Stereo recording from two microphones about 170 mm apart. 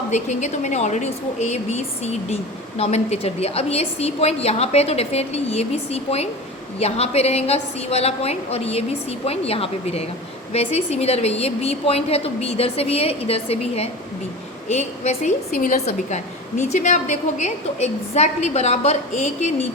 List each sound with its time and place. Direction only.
0.1 s a woman's voice: 45° left (ahead or behind)